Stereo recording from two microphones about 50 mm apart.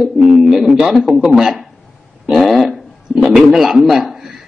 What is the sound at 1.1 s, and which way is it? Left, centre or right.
A man's voice, centre.